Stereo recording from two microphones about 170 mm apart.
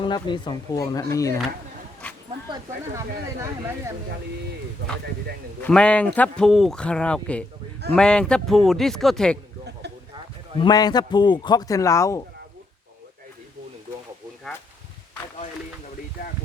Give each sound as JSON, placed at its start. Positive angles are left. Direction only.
{"t": 0.0, "sound": "a man's voice", "side_deg": 25}
{"t": 2.0, "sound": "dog", "side_deg": 10}
{"t": 5.6, "sound": "a man's voice", "side_deg": 5}
{"t": 10.6, "sound": "a man's voice", "side_deg": 25}